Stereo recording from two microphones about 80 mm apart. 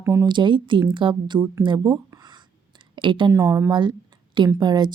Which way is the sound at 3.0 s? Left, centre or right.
Right.